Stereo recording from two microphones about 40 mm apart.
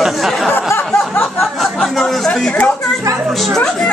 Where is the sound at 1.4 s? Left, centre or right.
Centre.